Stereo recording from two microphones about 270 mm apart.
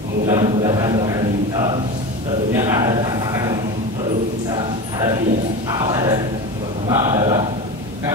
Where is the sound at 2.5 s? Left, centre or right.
Centre.